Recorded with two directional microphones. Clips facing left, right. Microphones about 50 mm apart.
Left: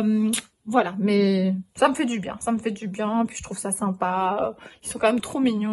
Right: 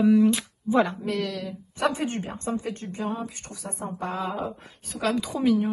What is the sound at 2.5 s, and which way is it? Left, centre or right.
A woman's voice, left.